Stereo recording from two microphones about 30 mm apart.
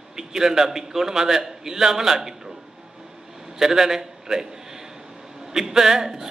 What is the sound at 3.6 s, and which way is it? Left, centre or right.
Speech, centre.